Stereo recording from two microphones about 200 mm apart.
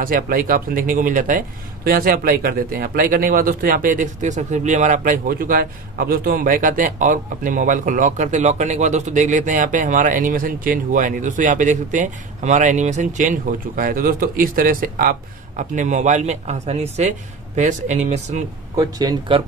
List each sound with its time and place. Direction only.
0.0 s speech: 45° right (ahead or behind)
18.8 s speech: 20° right (ahead or behind)